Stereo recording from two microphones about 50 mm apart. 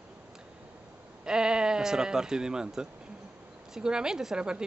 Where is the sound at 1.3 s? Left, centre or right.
Centre.